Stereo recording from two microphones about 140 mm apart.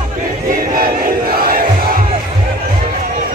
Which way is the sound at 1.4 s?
90° right.